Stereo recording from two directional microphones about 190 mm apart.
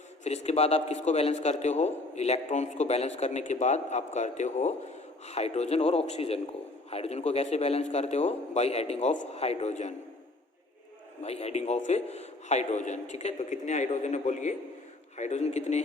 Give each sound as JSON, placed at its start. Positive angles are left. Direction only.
{"t": 0.3, "sound": "a man's voice", "side_deg": 35}
{"t": 11.2, "sound": "a man's voice", "side_deg": 35}